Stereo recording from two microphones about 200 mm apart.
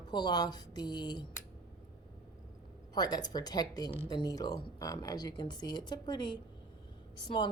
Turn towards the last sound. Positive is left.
turn(degrees=20)  # may be behind; listen again after turning